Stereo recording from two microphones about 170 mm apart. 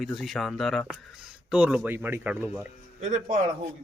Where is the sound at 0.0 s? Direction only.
Centre (ahead or behind).